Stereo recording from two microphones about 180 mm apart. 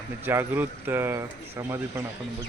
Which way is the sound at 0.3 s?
10° right (ahead or behind).